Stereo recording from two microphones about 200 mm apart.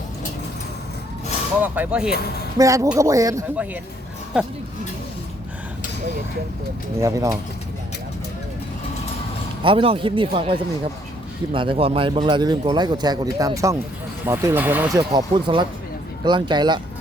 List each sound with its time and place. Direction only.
1.6 s speech: 10° right (ahead or behind)
2.0 s speech: 50° left (ahead or behind)
2.6 s speech: 15° right (ahead or behind)
4.3 s speech: 5° right (ahead or behind)
7.0 s speech: 15° right (ahead or behind)
9.6 s speech: 25° right (ahead or behind); by 15.0 s 10° right (ahead or behind)
15.1 s speech: 25° right (ahead or behind)